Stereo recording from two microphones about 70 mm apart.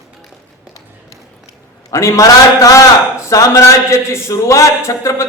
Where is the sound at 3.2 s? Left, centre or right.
Left.